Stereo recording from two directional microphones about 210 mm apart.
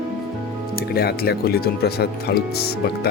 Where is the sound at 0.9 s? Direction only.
45° left (ahead or behind).